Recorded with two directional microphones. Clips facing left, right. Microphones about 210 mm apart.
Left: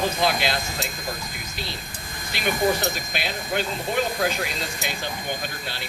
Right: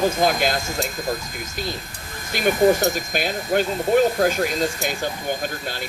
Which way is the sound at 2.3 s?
45° right (ahead or behind).